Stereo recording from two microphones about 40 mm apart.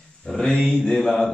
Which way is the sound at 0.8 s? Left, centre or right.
Centre.